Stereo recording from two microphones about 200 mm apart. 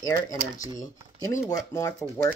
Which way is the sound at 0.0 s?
15° left (ahead or behind).